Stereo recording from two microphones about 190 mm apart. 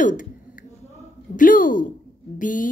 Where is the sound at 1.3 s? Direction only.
45° left (ahead or behind).